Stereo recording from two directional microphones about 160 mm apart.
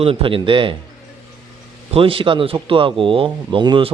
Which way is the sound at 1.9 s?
35° right (ahead or behind).